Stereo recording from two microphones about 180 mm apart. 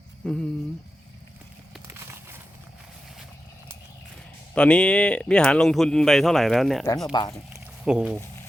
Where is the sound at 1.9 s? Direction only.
15° right (ahead or behind).